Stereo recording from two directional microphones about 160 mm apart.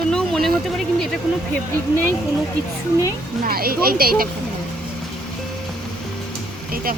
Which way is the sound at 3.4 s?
70° right (ahead or behind).